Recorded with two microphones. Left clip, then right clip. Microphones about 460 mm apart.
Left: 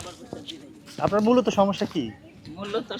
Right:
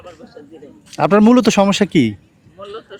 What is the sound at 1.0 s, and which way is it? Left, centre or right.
Speech, right.